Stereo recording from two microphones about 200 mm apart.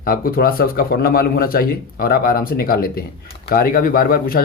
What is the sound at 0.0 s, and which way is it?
Speech, 45° left (ahead or behind).